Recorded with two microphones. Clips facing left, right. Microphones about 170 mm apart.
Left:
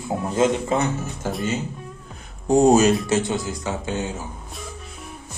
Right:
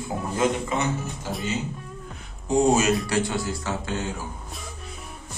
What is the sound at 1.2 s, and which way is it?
Speech, 50° left (ahead or behind).